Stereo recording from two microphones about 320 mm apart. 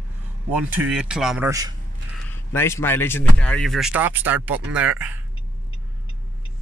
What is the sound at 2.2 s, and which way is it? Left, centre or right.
Speech, centre.